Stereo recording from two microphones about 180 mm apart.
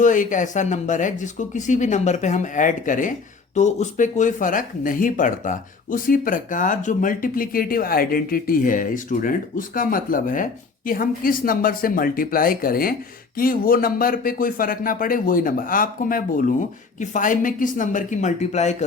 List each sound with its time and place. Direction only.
0.0 s speech: 45° left (ahead or behind)